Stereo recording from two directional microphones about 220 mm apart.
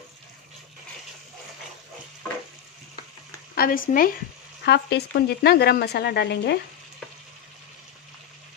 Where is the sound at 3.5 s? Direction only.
40° left (ahead or behind).